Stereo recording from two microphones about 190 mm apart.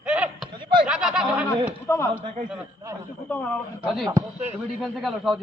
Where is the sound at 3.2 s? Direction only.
10° left (ahead or behind).